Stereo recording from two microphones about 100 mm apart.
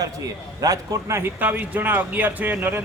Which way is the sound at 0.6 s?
35° right (ahead or behind).